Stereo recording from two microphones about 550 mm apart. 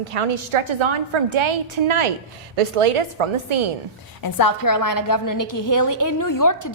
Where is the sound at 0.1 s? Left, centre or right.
Right.